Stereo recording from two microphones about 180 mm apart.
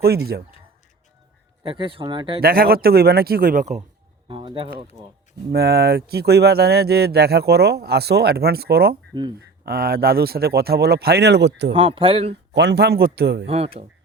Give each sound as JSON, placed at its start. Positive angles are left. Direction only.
{"t": 0.0, "sound": "speech", "side_deg": -60}
{"t": 1.6, "sound": "speech", "side_deg": -25}
{"t": 2.4, "sound": "speech", "side_deg": -55}
{"t": 4.3, "sound": "speech", "side_deg": -30}
{"t": 5.5, "sound": "speech", "side_deg": -60}
{"t": 11.7, "sound": "speech", "side_deg": -30}
{"t": 12.3, "sound": "speech", "side_deg": -70}